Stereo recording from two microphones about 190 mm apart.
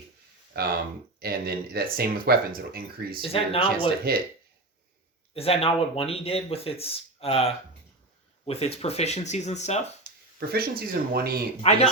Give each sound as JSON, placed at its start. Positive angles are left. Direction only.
{"t": 1.2, "sound": "speech", "side_deg": -55}
{"t": 3.2, "sound": "speech", "side_deg": 30}
{"t": 4.1, "sound": "speech", "side_deg": -55}
{"t": 5.3, "sound": "speech", "side_deg": 30}
{"t": 10.5, "sound": "speech", "side_deg": -55}
{"t": 11.6, "sound": "speech", "side_deg": 35}